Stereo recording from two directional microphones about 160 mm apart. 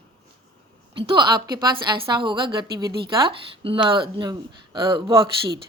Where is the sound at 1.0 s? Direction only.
30° right (ahead or behind).